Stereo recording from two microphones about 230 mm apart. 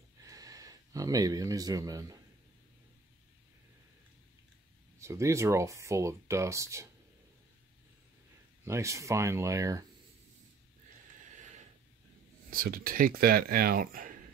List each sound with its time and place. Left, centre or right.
0.2 s a sound: centre
4.9 s speech: centre
8.6 s speech: centre
12.4 s speech: right